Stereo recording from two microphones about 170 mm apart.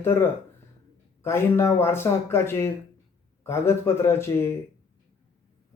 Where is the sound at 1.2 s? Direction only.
15° left (ahead or behind).